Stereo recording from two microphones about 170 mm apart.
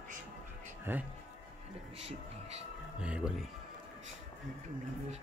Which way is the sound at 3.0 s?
5° right (ahead or behind).